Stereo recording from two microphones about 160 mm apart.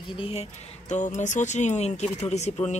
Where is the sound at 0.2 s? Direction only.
40° left (ahead or behind).